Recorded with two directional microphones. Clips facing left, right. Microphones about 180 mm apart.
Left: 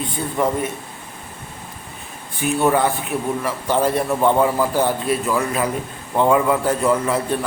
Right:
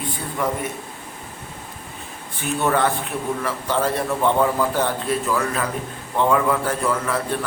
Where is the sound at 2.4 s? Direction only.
10° left (ahead or behind).